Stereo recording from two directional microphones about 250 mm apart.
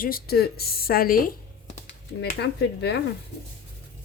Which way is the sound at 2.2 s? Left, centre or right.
Left.